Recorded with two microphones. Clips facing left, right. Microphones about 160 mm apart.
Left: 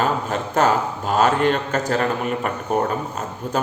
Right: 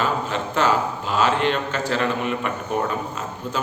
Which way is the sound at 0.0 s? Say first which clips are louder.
Left 2 dB; 45° left (ahead or behind).